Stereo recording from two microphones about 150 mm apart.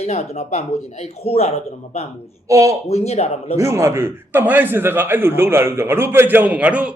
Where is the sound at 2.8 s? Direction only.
45° left (ahead or behind).